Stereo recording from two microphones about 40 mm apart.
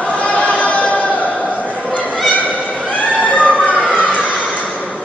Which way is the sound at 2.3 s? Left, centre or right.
Left.